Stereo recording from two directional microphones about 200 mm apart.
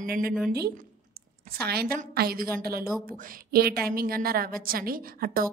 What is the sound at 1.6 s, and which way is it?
A woman's voice, 50° right (ahead or behind).